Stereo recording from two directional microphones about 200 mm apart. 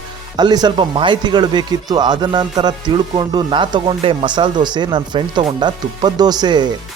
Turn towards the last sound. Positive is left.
turn(degrees=-20)  # may be behind; listen again after turning